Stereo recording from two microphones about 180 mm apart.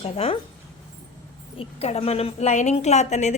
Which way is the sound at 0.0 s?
30° left (ahead or behind).